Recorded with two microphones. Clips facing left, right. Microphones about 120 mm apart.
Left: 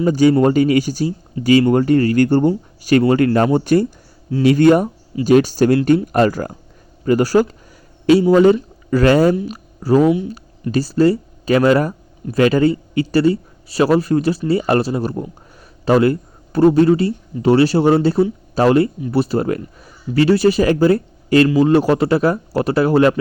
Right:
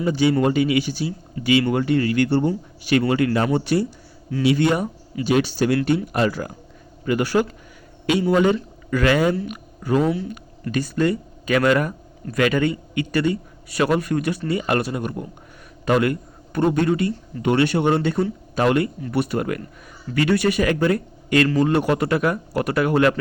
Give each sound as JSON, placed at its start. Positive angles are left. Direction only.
{"t": 0.0, "sound": "speech", "side_deg": 45}
{"t": 9.5, "sound": "a sound", "side_deg": 35}
{"t": 10.7, "sound": "speech", "side_deg": 35}